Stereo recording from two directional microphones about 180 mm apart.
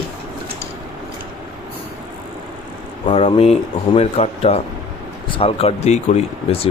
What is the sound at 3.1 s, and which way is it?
Speech, 35° left (ahead or behind).